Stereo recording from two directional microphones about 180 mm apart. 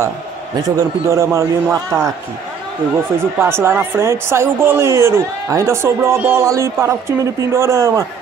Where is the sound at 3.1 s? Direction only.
15° right (ahead or behind).